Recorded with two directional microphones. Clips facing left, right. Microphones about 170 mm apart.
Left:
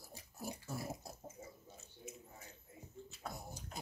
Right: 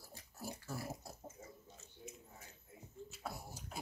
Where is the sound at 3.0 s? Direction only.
5° right (ahead or behind).